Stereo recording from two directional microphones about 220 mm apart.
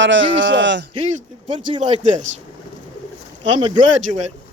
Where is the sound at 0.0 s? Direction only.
60° right (ahead or behind).